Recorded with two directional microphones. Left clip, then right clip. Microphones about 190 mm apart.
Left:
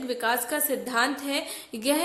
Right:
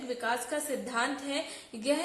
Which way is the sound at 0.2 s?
40° left (ahead or behind).